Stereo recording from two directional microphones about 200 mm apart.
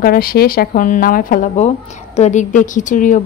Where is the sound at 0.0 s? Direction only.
45° left (ahead or behind).